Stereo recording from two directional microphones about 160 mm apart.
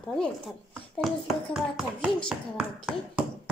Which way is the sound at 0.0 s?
5° left (ahead or behind).